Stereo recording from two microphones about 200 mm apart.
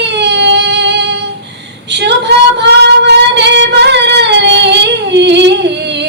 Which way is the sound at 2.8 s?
55° right (ahead or behind).